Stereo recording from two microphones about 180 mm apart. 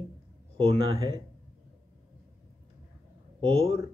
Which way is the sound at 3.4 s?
30° right (ahead or behind).